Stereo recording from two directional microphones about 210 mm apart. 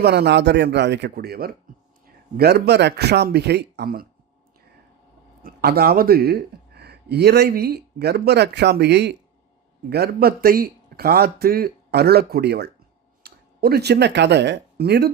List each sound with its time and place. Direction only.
0.0 s speech: 50° right (ahead or behind)
5.4 s speech: 45° right (ahead or behind)